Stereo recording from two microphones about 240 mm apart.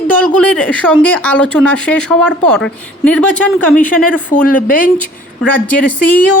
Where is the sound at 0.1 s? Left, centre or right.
Centre.